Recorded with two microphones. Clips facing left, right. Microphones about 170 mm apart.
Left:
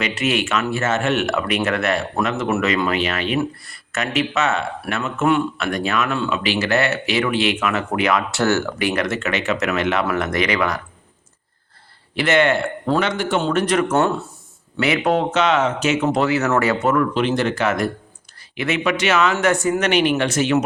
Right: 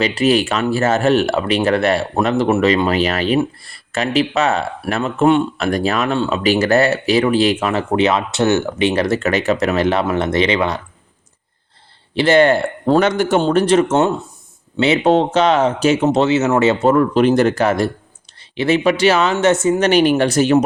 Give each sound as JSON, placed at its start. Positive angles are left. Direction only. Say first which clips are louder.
{"t": 0.0, "sound": "speech", "louder": "right 6 dB", "side_deg": -35}
{"t": 12.1, "sound": "speech", "louder": "right 5 dB", "side_deg": -30}
{"t": 19.9, "sound": "speech", "louder": "right 5 dB", "side_deg": -40}